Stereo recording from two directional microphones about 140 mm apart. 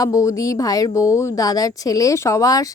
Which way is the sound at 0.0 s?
25° left (ahead or behind).